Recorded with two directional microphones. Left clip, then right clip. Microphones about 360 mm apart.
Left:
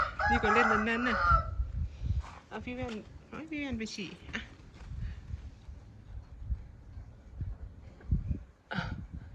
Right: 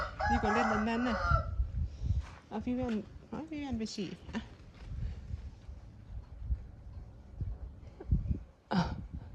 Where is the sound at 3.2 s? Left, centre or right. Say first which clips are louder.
Left 5 dB; centre.